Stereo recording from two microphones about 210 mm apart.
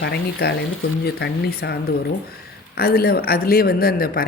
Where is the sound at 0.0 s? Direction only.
50° left (ahead or behind).